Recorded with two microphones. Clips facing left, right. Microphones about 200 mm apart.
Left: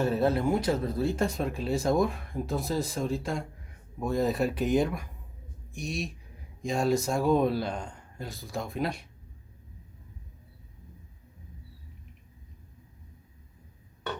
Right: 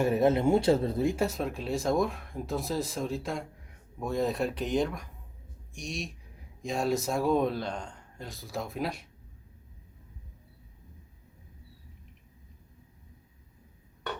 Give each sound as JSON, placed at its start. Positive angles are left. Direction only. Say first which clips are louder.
{"t": 0.0, "sound": "speech", "louder": "right 2 dB", "side_deg": -15}
{"t": 1.0, "sound": "speech", "louder": "even", "side_deg": -10}